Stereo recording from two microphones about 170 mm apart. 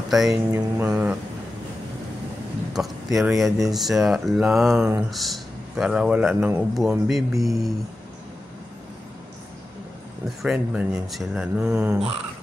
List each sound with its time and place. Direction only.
0.1 s mantra: centre (ahead or behind)
0.5 s mantra: 15° right (ahead or behind)
2.7 s speech: centre (ahead or behind)
10.2 s speech: 5° right (ahead or behind)